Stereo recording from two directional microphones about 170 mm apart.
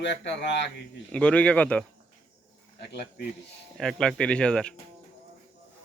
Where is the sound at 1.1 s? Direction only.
10° left (ahead or behind).